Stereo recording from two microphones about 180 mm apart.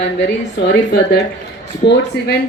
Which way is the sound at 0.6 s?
65° left (ahead or behind).